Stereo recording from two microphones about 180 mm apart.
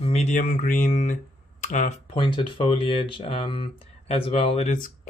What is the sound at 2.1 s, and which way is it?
Speech, 25° left (ahead or behind).